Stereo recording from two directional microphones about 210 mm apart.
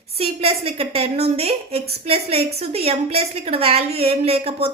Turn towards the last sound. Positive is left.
turn(degrees=-30)  # may be behind; listen again after turning